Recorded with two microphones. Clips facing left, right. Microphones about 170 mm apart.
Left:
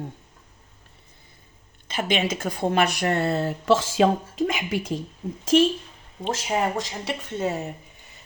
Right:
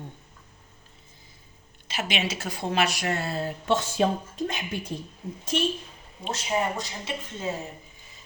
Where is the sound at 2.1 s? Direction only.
50° left (ahead or behind); by 7.7 s 65° left (ahead or behind).